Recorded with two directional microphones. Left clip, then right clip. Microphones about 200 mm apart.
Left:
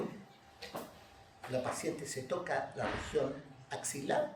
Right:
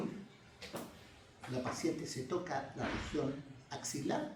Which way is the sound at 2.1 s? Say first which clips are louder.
Left 3 dB; 40° left (ahead or behind).